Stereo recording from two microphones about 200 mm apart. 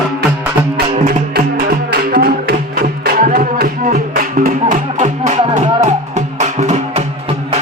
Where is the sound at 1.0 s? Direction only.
45° right (ahead or behind).